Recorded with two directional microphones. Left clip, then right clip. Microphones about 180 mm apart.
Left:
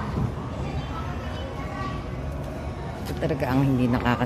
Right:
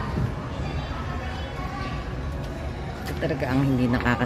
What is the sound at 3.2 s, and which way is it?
Speech, 5° left (ahead or behind).